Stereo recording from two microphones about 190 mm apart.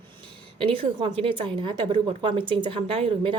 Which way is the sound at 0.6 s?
30° right (ahead or behind).